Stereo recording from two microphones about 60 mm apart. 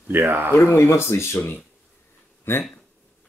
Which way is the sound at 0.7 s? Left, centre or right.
Left.